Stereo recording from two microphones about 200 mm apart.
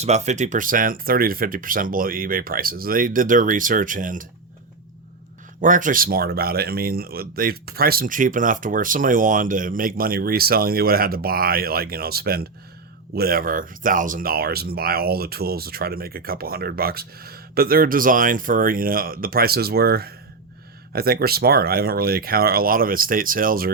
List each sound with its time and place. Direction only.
0.0 s speech: 35° right (ahead or behind)
5.5 s speech: 40° right (ahead or behind)